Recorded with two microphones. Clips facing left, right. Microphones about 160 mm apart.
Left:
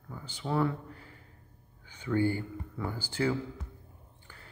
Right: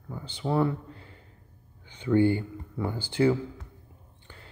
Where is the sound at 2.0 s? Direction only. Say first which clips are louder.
Right 6 dB; 20° right (ahead or behind).